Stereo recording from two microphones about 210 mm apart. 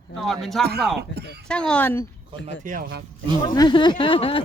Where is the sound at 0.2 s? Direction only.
Centre (ahead or behind).